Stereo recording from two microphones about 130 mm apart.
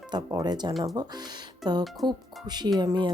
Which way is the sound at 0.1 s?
30° right (ahead or behind).